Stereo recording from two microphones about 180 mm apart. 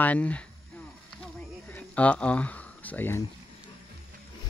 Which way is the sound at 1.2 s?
10° left (ahead or behind).